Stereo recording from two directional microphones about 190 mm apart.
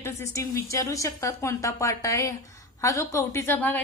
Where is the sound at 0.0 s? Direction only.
15° left (ahead or behind).